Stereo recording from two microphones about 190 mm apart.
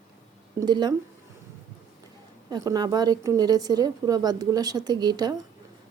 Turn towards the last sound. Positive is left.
turn(degrees=-20)  # may be behind; listen again after turning